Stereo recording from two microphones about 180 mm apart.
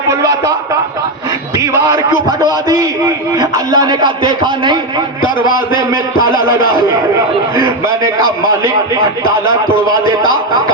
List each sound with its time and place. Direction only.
0.1 s a man's voice: 20° right (ahead or behind)
1.5 s a man's voice: 15° right (ahead or behind)
3.4 s a man's voice: 25° right (ahead or behind)
5.2 s a man's voice: 50° left (ahead or behind)
7.5 s a sound: 55° left (ahead or behind)
9.2 s a man's voice: 55° left (ahead or behind)